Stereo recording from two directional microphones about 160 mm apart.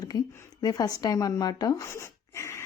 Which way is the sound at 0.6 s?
25° left (ahead or behind).